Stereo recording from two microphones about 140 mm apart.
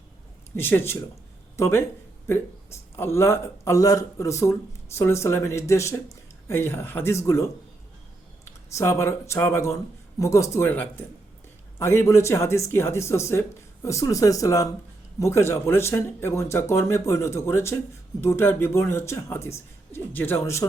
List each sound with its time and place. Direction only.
0.5 s speech: 15° left (ahead or behind)
2.9 s speech: 15° left (ahead or behind)
8.7 s speech: 20° left (ahead or behind)